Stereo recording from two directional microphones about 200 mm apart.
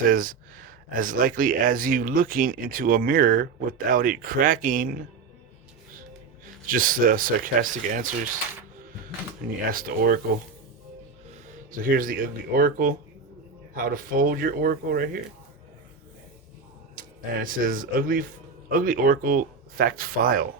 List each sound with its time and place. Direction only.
0.0 s speech: 45° right (ahead or behind)
6.4 s speech: 45° right (ahead or behind)
9.7 s speech: 45° right (ahead or behind)
11.3 s speech: 45° right (ahead or behind)
17.4 s speech: 45° right (ahead or behind)